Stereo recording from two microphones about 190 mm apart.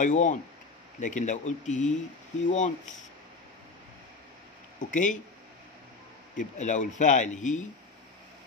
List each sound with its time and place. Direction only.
0.0 s a man's voice: 40° left (ahead or behind)
4.7 s a man's voice: 40° left (ahead or behind)
6.3 s a man's voice: 40° left (ahead or behind)